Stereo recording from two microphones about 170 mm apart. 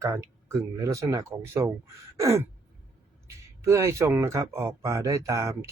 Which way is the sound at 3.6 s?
15° right (ahead or behind).